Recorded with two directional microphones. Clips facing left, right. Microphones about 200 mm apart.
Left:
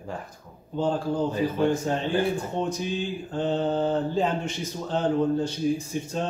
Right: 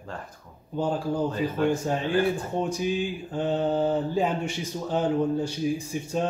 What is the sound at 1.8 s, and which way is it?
Speech, 10° right (ahead or behind).